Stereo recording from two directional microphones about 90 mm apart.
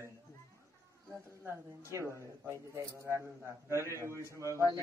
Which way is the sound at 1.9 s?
30° right (ahead or behind).